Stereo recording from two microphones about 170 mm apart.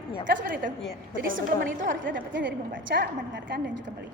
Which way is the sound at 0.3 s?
75° right (ahead or behind).